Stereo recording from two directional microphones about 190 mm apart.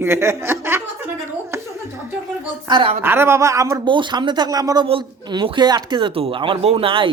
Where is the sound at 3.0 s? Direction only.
10° right (ahead or behind).